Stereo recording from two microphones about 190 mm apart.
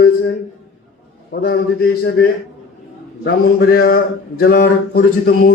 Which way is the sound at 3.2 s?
55° left (ahead or behind).